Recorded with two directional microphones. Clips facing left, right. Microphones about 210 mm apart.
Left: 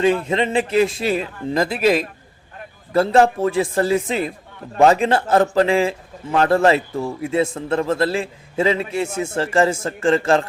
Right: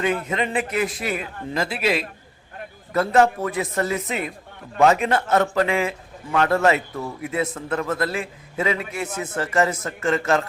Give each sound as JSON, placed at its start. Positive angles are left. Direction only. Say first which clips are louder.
{"t": 0.0, "sound": "a man's voice", "louder": "left 6 dB", "side_deg": 30}
{"t": 2.9, "sound": "a man's voice", "louder": "left 3 dB", "side_deg": 30}